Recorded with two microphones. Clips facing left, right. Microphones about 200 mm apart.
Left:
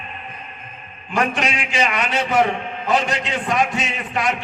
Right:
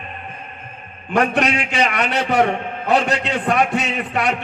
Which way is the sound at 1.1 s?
65° right (ahead or behind).